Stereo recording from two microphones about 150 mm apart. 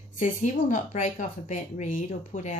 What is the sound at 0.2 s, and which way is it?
Speech, 55° left (ahead or behind).